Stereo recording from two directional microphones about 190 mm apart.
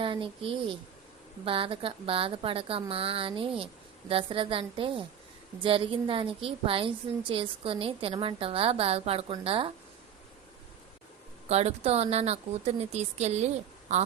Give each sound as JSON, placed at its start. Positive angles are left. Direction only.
{"t": 0.0, "sound": "a woman's voice", "side_deg": -25}
{"t": 11.4, "sound": "a woman's voice", "side_deg": -35}